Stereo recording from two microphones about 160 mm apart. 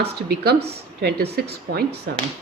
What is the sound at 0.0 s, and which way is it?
A woman's voice, 85° right.